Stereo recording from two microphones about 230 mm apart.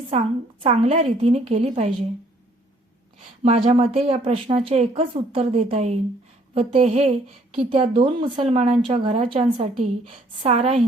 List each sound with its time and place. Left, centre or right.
0.6 s a woman's voice: right
3.2 s a woman's voice: right